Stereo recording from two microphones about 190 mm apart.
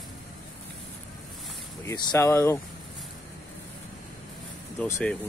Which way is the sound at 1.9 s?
20° left (ahead or behind).